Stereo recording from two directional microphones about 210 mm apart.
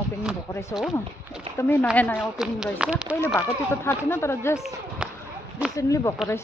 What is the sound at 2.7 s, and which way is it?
Speech, 5° right (ahead or behind).